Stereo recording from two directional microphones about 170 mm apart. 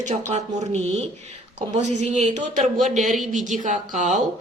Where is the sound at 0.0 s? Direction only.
45° right (ahead or behind).